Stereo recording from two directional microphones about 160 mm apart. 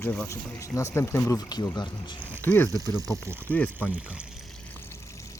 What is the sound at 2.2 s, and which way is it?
Speech, 10° left (ahead or behind).